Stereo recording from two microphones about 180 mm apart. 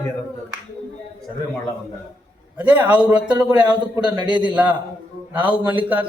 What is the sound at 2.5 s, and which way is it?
A man's voice, 10° right (ahead or behind).